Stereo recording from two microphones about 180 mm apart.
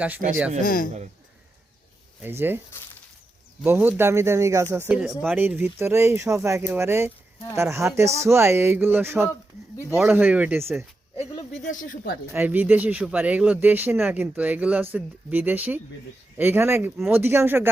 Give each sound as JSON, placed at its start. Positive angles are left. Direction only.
{"t": 0.2, "sound": "speech", "side_deg": -50}
{"t": 0.6, "sound": "speech", "side_deg": 50}
{"t": 2.2, "sound": "speech", "side_deg": -10}
{"t": 3.6, "sound": "speech", "side_deg": -10}
{"t": 4.9, "sound": "speech", "side_deg": -5}
{"t": 11.3, "sound": "speech", "side_deg": 40}
{"t": 12.3, "sound": "speech", "side_deg": -10}